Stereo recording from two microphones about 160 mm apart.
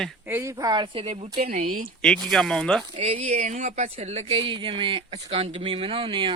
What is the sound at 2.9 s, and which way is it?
Speech, 40° right (ahead or behind).